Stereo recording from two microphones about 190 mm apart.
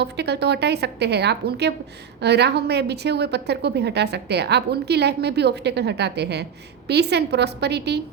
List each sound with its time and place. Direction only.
0.0 s a woman's voice: 60° right (ahead or behind)